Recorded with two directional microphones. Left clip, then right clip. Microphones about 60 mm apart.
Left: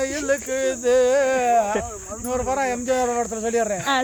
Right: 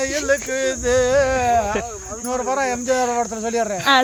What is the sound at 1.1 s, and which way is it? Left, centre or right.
Cricket, left.